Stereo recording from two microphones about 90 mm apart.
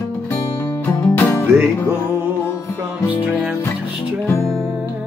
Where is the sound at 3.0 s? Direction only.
15° right (ahead or behind).